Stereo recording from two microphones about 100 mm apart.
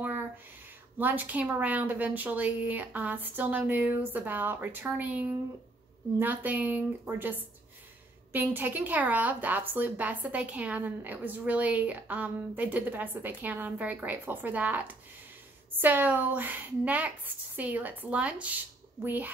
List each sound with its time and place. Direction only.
0.9 s a woman's voice: 20° right (ahead or behind)